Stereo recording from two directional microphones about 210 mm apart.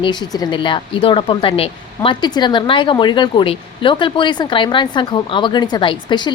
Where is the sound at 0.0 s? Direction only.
20° left (ahead or behind).